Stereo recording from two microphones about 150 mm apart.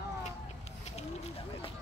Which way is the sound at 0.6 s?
45° left (ahead or behind).